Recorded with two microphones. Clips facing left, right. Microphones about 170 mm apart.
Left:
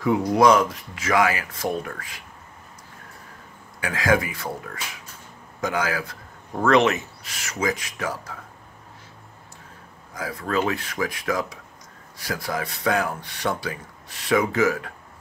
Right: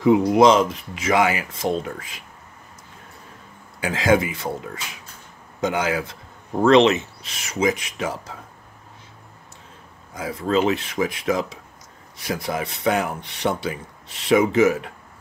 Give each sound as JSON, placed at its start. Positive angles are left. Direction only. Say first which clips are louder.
{"t": 0.0, "sound": "speech", "louder": "right 4 dB", "side_deg": -20}
{"t": 3.8, "sound": "speech", "louder": "right 3 dB", "side_deg": -25}
{"t": 10.1, "sound": "speech", "louder": "right 4 dB", "side_deg": -20}